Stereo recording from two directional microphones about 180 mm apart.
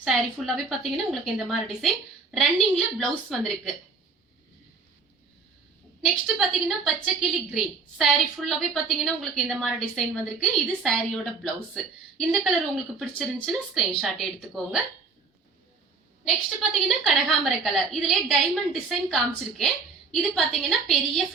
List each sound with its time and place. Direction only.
0.0 s a woman's voice: centre (ahead or behind)
6.2 s a woman's voice: centre (ahead or behind)
17.0 s a woman's voice: centre (ahead or behind)